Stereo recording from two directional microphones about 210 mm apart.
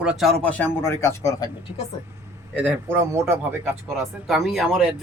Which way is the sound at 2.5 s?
10° right (ahead or behind).